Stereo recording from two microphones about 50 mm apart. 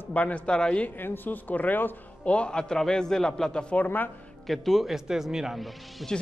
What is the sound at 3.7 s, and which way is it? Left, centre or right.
Speech, left.